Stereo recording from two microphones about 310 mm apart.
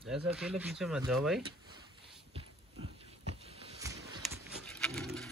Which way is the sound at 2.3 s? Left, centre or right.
Centre.